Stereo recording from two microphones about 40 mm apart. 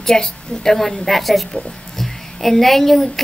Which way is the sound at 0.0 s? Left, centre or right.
Centre.